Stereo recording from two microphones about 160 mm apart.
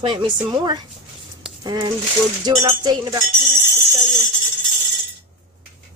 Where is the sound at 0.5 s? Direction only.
25° right (ahead or behind).